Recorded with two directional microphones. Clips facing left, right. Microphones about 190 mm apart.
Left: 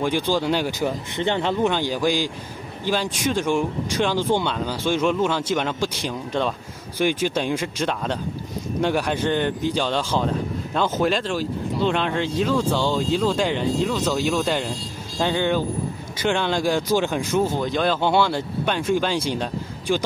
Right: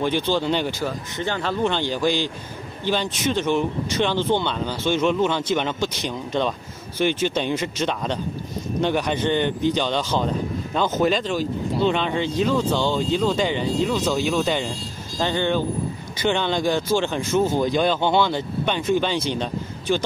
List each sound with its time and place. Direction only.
0.0 s speech: 10° left (ahead or behind)
0.7 s speech: 20° left (ahead or behind)
1.6 s speech: 10° left (ahead or behind)
17.6 s speech: 5° right (ahead or behind)